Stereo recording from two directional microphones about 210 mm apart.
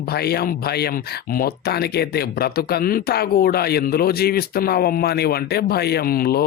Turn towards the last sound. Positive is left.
turn(degrees=45)  # may be behind; listen again after turning